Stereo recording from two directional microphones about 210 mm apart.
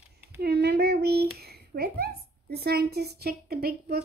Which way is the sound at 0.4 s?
50° right (ahead or behind).